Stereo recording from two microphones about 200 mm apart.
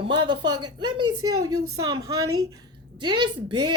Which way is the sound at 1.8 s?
20° right (ahead or behind).